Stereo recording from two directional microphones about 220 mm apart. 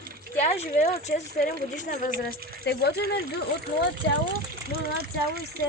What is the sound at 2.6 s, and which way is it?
Speech, 50° left (ahead or behind).